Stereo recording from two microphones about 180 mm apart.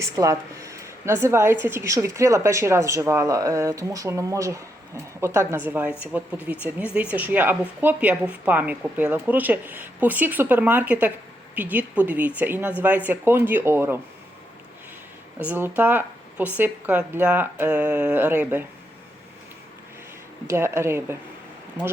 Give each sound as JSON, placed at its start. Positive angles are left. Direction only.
{"t": 0.0, "sound": "a woman's voice", "side_deg": -15}
{"t": 15.4, "sound": "a woman's voice", "side_deg": -10}
{"t": 20.5, "sound": "a woman's voice", "side_deg": -15}